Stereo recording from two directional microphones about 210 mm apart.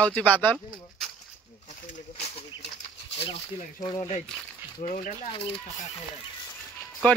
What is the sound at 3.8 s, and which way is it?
Speech, 15° left (ahead or behind).